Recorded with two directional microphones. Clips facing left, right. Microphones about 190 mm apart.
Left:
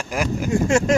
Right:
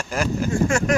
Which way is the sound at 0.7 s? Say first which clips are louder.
Left 3 dB; 25° left (ahead or behind).